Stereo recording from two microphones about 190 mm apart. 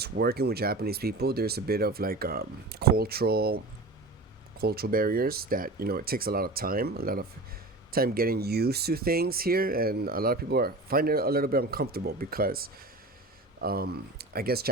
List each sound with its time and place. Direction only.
0.0 s speech: 55° right (ahead or behind)
4.6 s speech: 55° right (ahead or behind)